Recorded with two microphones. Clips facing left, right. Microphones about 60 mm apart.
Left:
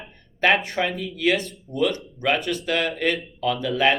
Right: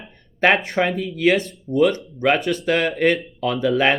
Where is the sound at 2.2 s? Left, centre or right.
Right.